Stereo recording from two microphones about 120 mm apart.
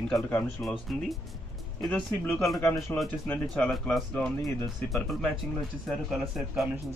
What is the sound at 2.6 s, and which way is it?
Speech, 20° left (ahead or behind).